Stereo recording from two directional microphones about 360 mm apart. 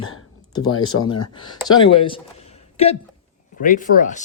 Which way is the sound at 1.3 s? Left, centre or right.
Centre.